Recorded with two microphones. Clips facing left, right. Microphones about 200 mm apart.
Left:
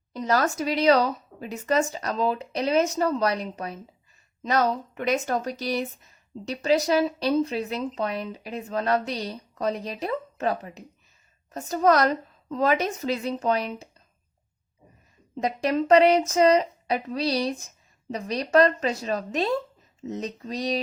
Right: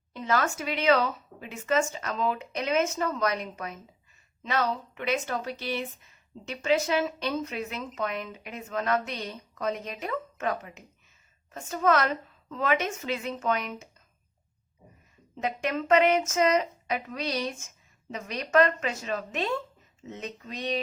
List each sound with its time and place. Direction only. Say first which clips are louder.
0.1 s speech: left 4 dB; 40° left (ahead or behind)
15.4 s speech: left 5 dB; 35° left (ahead or behind)